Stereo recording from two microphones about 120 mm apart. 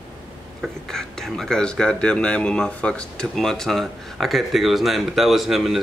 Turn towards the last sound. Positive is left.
turn(degrees=-5)  # may be behind; listen again after turning